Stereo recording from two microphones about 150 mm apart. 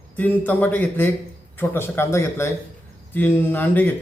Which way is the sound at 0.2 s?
10° left (ahead or behind).